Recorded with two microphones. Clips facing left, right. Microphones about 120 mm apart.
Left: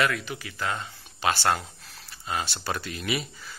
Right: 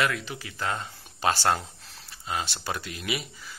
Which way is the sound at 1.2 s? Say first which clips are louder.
Right 1 dB; 40° right (ahead or behind).